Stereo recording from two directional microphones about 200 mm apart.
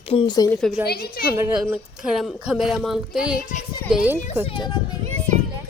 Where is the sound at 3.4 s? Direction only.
40° left (ahead or behind).